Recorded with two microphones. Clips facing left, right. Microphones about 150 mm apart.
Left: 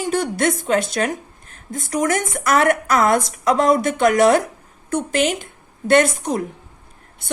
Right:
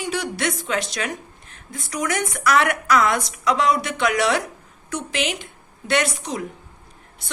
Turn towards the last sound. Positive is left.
turn(degrees=50)  # may be behind; listen again after turning